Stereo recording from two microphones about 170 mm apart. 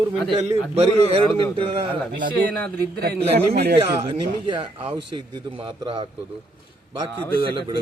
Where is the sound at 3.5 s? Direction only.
75° right (ahead or behind).